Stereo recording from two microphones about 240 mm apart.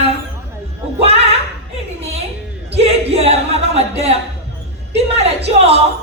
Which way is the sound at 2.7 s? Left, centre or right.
Right.